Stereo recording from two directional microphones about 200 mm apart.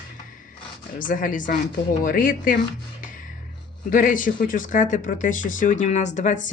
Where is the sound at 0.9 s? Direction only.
45° left (ahead or behind).